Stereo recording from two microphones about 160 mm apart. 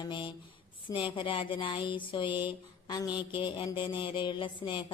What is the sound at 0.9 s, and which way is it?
Speech, 30° left (ahead or behind).